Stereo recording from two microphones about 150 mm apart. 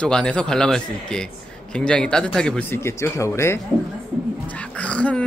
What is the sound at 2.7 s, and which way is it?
Speech, 15° left (ahead or behind).